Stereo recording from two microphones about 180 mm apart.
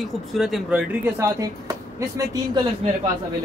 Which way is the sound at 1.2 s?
20° right (ahead or behind).